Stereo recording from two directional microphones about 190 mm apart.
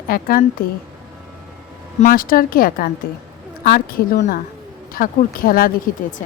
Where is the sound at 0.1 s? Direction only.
50° left (ahead or behind).